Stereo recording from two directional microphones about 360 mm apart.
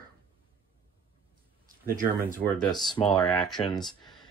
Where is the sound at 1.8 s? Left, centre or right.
Right.